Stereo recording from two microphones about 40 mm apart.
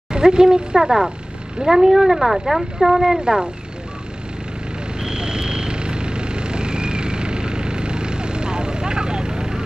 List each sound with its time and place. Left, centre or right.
0.1 s speech: right
3.2 s speech: right
5.0 s vehicle: right